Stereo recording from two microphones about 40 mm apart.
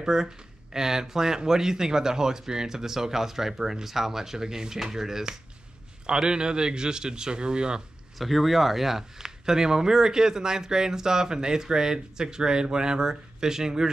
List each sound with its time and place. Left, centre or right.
0.0 s speech: centre
6.0 s speech: right
8.2 s speech: centre